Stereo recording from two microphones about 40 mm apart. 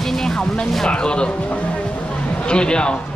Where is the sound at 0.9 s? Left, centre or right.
Left.